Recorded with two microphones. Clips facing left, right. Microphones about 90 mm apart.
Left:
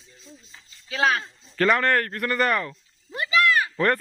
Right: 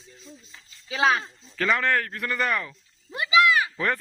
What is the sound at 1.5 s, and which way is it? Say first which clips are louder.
A child's voice: left 3 dB; 5° left (ahead or behind).